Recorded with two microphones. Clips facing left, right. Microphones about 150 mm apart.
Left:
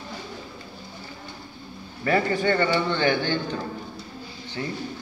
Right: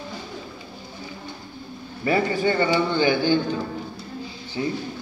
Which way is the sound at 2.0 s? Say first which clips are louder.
Right 1 dB; 10° right (ahead or behind).